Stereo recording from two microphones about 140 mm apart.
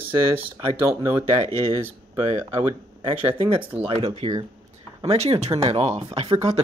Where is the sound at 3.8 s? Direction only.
40° right (ahead or behind).